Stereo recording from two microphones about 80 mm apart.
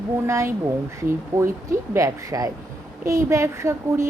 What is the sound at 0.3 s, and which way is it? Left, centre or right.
Speech, right.